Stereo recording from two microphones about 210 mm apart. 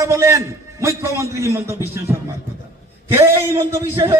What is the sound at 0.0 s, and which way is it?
A man's voice, 15° right (ahead or behind).